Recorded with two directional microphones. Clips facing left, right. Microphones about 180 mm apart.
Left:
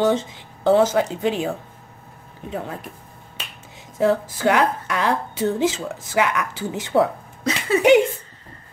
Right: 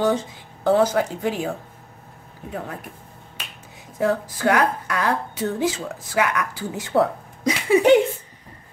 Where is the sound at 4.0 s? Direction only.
25° left (ahead or behind).